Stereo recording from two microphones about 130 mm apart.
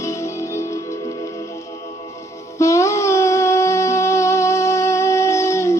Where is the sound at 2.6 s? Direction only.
20° left (ahead or behind).